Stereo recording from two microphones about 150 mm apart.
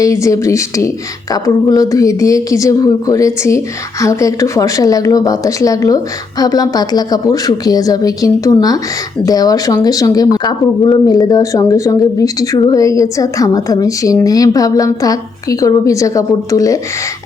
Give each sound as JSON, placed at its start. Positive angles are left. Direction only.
{"t": 0.0, "sound": "speech", "side_deg": 20}